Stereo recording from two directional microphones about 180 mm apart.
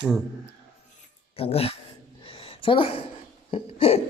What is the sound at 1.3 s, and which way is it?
Speech, 35° left (ahead or behind).